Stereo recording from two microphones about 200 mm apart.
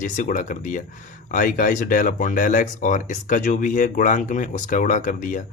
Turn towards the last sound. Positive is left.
turn(degrees=40)  # may be behind; listen again after turning